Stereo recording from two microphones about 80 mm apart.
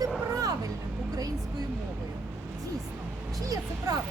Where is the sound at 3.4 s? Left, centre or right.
Right.